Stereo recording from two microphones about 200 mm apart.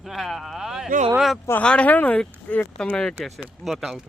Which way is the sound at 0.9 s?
40° right (ahead or behind).